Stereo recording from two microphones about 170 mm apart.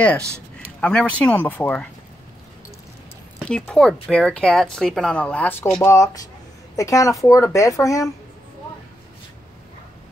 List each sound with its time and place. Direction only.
0.7 s speech: 5° left (ahead or behind)
3.4 s speech: 5° left (ahead or behind)